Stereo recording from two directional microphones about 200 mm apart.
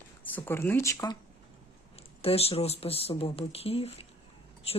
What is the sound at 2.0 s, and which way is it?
Speech, 30° left (ahead or behind).